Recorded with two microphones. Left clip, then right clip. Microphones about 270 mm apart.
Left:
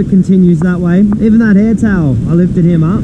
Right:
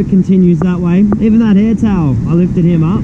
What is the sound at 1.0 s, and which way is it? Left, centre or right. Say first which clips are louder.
Speech: left 1 dB; left.